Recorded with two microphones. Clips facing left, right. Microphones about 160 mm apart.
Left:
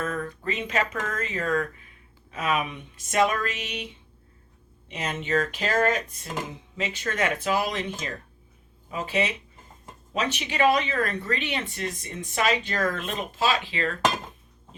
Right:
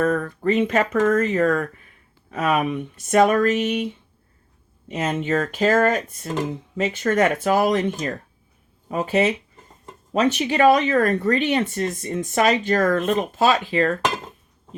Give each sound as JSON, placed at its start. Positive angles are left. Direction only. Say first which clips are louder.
{"t": 0.0, "sound": "speech", "louder": "right 9 dB", "side_deg": -50}
{"t": 4.9, "sound": "speech", "louder": "right 6 dB", "side_deg": -45}